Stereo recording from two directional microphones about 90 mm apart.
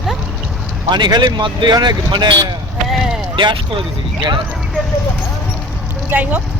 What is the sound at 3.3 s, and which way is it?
Speech, 70° right (ahead or behind).